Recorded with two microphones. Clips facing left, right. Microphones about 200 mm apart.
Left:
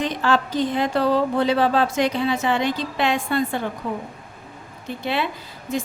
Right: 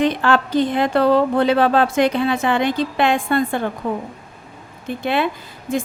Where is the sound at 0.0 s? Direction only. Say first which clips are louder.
Right 4 dB; 60° right (ahead or behind).